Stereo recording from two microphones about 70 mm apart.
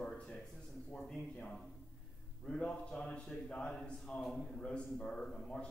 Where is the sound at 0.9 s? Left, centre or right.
Centre.